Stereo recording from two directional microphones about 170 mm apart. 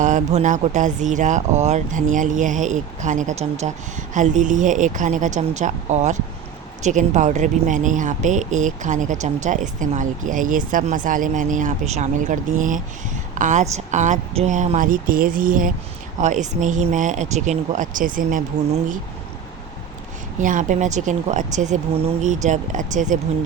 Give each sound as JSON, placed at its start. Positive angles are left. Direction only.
{"t": 0.0, "sound": "speech", "side_deg": -45}
{"t": 20.4, "sound": "speech", "side_deg": -50}